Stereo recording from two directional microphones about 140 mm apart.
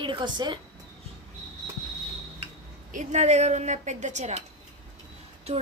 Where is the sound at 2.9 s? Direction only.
60° right (ahead or behind).